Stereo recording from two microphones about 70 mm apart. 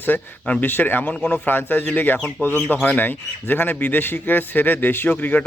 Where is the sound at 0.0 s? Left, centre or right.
Left.